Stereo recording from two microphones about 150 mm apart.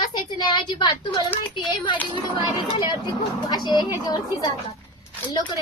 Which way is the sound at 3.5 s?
30° left (ahead or behind).